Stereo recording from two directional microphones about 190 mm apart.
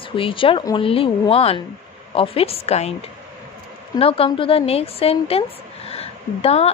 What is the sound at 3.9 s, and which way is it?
A woman's voice, 30° left (ahead or behind).